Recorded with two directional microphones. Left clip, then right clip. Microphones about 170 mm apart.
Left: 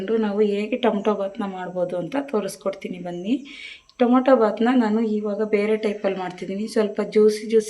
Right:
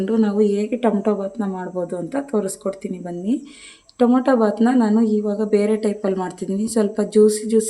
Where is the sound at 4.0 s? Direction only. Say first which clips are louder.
Even; 90° right.